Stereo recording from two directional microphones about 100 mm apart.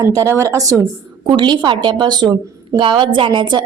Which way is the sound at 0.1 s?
30° right (ahead or behind).